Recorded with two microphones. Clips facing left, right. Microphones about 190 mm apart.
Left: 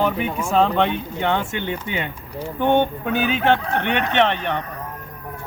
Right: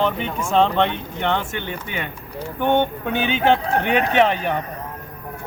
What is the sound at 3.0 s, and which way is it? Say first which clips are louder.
Speech: even; 5° left (ahead or behind).